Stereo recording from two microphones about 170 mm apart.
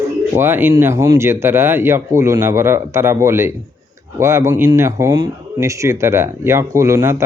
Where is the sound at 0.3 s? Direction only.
15° right (ahead or behind).